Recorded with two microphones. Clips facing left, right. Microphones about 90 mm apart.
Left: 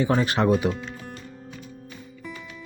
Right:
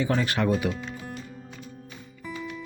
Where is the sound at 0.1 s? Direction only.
25° left (ahead or behind).